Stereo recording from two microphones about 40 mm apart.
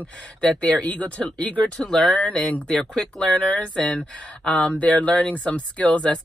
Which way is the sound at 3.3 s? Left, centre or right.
Left.